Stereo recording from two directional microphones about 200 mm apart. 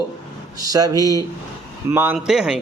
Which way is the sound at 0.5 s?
20° right (ahead or behind).